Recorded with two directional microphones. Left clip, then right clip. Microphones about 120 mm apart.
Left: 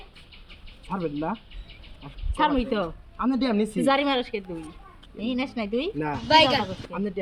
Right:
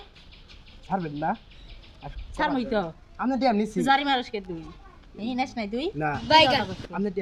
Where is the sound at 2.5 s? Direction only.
15° right (ahead or behind).